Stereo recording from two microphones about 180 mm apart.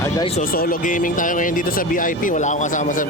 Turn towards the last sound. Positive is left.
turn(degrees=45)  # may be behind; listen again after turning